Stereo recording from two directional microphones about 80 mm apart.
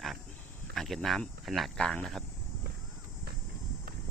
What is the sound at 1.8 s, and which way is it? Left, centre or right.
Speech, centre.